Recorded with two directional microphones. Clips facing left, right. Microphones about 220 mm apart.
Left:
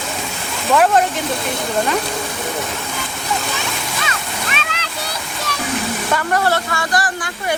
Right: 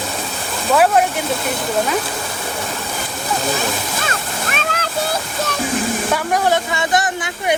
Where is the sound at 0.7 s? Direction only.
5° right (ahead or behind).